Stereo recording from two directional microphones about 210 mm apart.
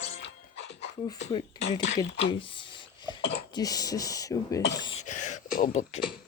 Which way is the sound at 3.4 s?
20° left (ahead or behind).